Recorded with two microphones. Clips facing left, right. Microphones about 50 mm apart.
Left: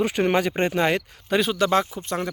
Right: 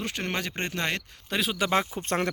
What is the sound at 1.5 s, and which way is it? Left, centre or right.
Speech, centre.